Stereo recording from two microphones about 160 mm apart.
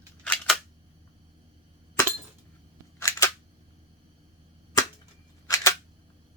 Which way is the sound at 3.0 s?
20° left (ahead or behind).